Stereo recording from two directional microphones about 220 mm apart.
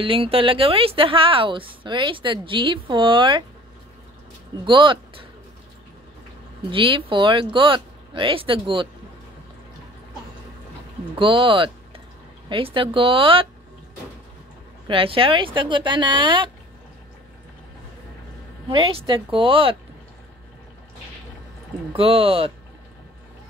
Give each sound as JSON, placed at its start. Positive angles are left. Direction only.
{"t": 0.0, "sound": "a woman's voice", "side_deg": -25}
{"t": 4.6, "sound": "a woman's voice", "side_deg": -20}
{"t": 6.7, "sound": "a woman's voice", "side_deg": -25}
{"t": 11.1, "sound": "a woman's voice", "side_deg": -25}
{"t": 14.9, "sound": "a woman's voice", "side_deg": -25}
{"t": 18.7, "sound": "a woman's voice", "side_deg": -25}
{"t": 21.9, "sound": "a woman's voice", "side_deg": -25}